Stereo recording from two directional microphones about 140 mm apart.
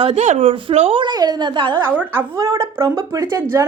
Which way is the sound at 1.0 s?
30° right (ahead or behind).